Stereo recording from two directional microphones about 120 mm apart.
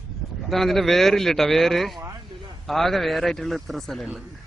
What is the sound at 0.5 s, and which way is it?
A man's voice, centre (ahead or behind).